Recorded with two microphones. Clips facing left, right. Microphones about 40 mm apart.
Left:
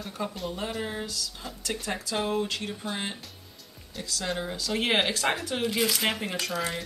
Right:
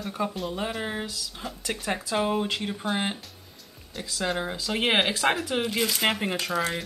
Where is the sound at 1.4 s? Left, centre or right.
Centre.